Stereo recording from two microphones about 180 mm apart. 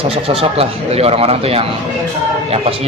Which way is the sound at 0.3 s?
30° right (ahead or behind).